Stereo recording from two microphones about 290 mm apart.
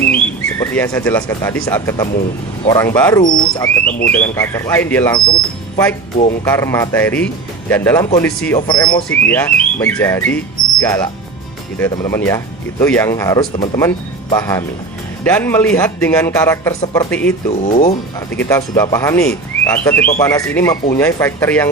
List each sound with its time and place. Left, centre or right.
0.6 s speech: centre
17.5 s speech: left
18.3 s speech: centre